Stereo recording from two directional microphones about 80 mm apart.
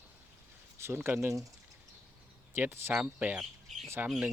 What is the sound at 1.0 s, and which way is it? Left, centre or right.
Speech, right.